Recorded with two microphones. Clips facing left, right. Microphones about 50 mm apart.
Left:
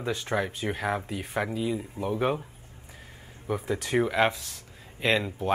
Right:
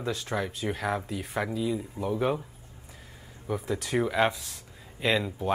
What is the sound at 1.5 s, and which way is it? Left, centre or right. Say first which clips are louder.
Speech: even; left.